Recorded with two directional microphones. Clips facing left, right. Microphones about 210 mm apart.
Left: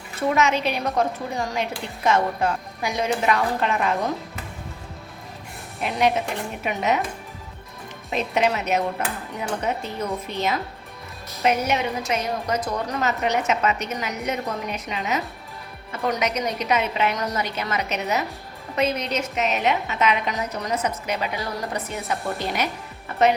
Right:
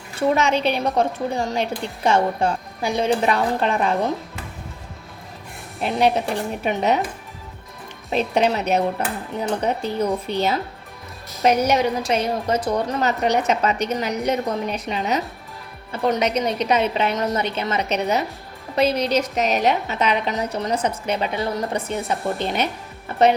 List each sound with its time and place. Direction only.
0.2 s a woman's voice: 30° right (ahead or behind)
5.8 s a woman's voice: 30° right (ahead or behind)
8.1 s a woman's voice: 30° right (ahead or behind)